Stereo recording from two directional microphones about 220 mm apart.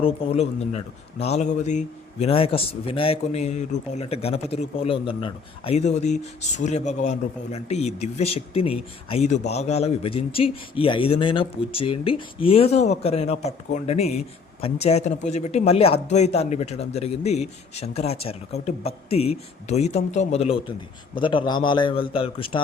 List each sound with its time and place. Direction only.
0.0 s speech: 30° left (ahead or behind)